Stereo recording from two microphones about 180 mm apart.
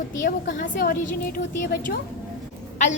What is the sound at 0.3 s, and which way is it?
Speech, 50° left (ahead or behind).